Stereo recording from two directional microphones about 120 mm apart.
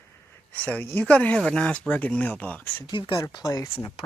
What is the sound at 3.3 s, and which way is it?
Speech, 30° left (ahead or behind).